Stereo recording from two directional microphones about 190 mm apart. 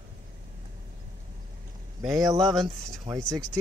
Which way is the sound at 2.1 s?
20° right (ahead or behind).